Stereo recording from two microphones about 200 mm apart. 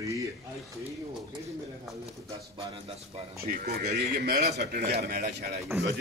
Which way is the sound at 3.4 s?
50° right (ahead or behind).